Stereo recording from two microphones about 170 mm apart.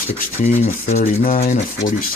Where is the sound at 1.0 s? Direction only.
55° left (ahead or behind).